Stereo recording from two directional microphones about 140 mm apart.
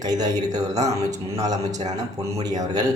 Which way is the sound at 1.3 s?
25° right (ahead or behind).